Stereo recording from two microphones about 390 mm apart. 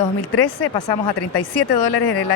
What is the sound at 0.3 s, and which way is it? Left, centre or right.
Speech, left.